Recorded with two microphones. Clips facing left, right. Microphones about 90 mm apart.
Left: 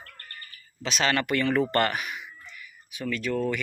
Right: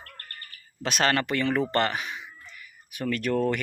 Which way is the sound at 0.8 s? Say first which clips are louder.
Right 2 dB; 50° right (ahead or behind).